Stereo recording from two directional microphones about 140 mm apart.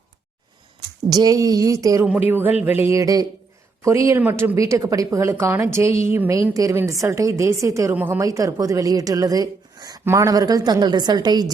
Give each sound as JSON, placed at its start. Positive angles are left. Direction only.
{"t": 1.1, "sound": "a woman's voice", "side_deg": -25}
{"t": 2.0, "sound": "a woman's voice", "side_deg": -10}